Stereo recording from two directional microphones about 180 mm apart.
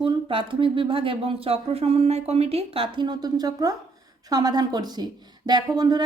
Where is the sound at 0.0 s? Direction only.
30° right (ahead or behind).